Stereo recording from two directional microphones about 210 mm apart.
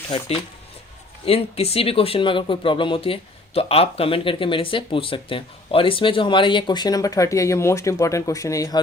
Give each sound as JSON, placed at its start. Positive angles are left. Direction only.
{"t": 1.2, "sound": "speech", "side_deg": 30}